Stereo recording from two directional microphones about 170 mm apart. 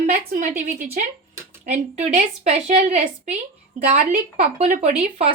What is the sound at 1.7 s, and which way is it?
A woman's voice, 40° right (ahead or behind).